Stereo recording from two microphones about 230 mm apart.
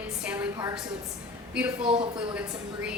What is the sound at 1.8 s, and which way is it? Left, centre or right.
Speech, right.